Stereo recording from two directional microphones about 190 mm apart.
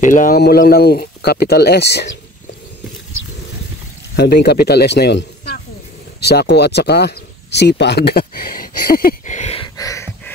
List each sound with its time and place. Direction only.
0.0 s speech: 45° left (ahead or behind)
0.4 s speech: 55° left (ahead or behind)
4.2 s speech: 60° left (ahead or behind); by 9.7 s 35° left (ahead or behind)
9.8 s a sound: 15° left (ahead or behind)